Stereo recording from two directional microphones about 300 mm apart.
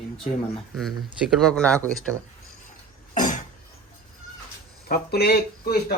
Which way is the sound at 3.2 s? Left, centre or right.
Left.